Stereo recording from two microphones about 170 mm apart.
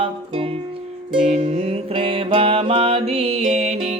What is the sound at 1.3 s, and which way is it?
Music, 40° right (ahead or behind).